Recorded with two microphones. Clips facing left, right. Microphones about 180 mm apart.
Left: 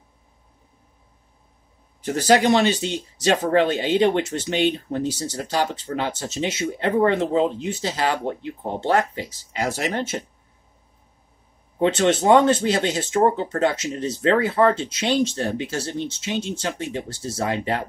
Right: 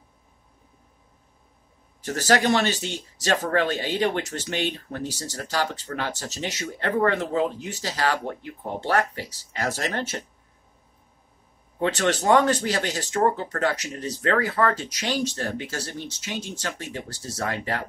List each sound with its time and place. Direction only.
2.0 s speech: 15° left (ahead or behind)
11.8 s speech: 20° left (ahead or behind)